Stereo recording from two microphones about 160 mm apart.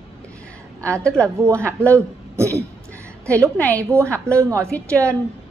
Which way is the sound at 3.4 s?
10° left (ahead or behind).